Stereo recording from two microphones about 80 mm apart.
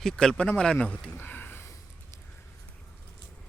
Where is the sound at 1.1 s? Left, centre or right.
Left.